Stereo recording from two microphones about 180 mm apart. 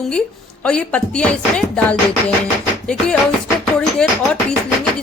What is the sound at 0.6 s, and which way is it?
A woman's voice, 5° left (ahead or behind).